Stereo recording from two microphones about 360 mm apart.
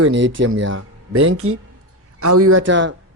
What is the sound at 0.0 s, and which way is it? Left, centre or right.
A man's voice, right.